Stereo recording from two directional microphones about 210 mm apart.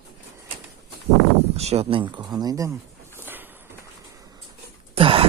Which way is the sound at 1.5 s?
30° right (ahead or behind).